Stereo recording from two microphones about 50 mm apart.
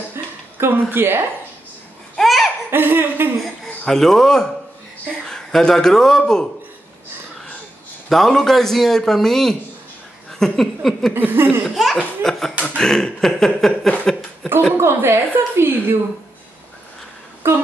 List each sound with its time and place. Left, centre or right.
0.1 s a sound: right
0.9 s laughter: right
2.1 s laughter: centre
2.7 s laughter: right
3.8 s a man's voice: centre
8.1 s a man's voice: centre
10.4 s a sound: centre
11.1 s laughter: right
11.6 s laughter: centre
12.6 s a man's voice: centre
14.8 s a woman's voice: right
17.4 s speech: right